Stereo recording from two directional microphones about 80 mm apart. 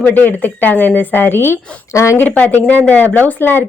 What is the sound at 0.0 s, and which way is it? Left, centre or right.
A woman's voice, left.